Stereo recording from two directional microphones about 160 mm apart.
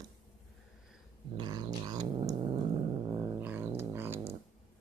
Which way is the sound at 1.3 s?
30° right (ahead or behind).